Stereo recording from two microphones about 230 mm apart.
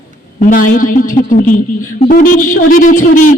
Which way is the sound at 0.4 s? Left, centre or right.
Left.